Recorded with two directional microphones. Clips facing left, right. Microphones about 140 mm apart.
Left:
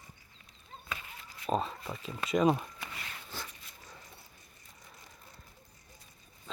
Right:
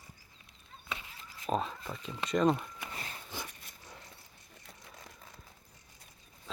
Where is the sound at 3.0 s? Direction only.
35° right (ahead or behind).